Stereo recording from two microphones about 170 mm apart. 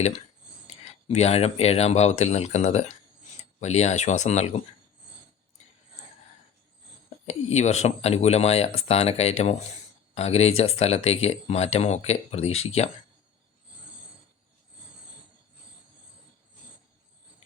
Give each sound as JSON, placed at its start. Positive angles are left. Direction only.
{"t": 1.0, "sound": "speech", "side_deg": 40}
{"t": 7.3, "sound": "speech", "side_deg": 40}